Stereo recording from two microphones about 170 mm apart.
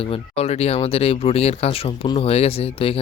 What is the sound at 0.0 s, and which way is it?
Speech, 35° left (ahead or behind).